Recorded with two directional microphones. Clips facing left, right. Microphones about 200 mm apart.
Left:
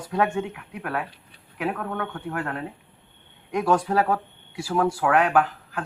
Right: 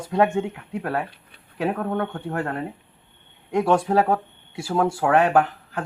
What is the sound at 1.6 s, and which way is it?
Speech, 30° right (ahead or behind).